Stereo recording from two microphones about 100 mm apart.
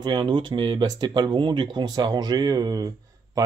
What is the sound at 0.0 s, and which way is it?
Speech, 50° right (ahead or behind).